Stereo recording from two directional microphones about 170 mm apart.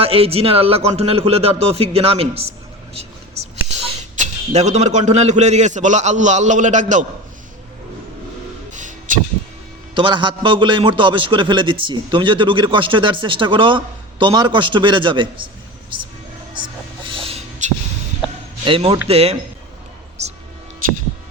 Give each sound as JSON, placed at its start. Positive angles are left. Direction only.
{"t": 0.0, "sound": "a man's voice", "side_deg": -35}
{"t": 3.7, "sound": "a man's voice", "side_deg": -45}
{"t": 8.7, "sound": "music", "side_deg": -50}
{"t": 9.9, "sound": "a man's voice", "side_deg": -30}
{"t": 16.6, "sound": "a sound", "side_deg": -30}
{"t": 18.6, "sound": "a man's voice", "side_deg": -30}
{"t": 20.2, "sound": "a sound", "side_deg": -40}